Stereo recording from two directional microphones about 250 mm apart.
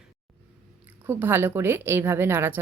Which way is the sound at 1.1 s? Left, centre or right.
Centre.